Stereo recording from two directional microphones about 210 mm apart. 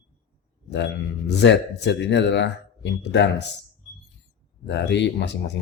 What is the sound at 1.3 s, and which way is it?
Speech, 55° left (ahead or behind).